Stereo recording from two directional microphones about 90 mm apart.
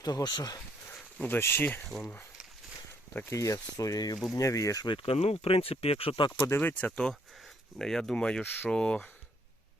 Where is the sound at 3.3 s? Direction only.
40° left (ahead or behind).